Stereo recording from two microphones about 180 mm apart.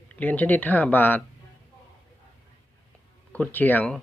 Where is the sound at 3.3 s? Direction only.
10° left (ahead or behind).